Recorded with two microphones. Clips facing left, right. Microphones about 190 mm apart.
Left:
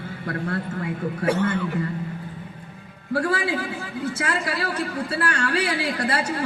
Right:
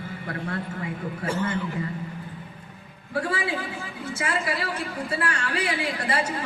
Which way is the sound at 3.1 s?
65° left (ahead or behind).